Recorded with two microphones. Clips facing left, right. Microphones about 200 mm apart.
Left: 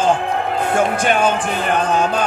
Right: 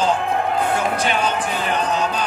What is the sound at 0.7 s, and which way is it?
Speech, 50° left (ahead or behind).